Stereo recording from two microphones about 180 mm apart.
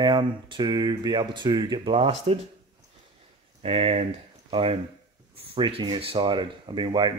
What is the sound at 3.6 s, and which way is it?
Speech, 35° right (ahead or behind).